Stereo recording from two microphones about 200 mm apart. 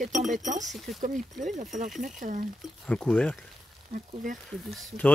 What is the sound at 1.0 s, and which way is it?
Speech, 40° right (ahead or behind).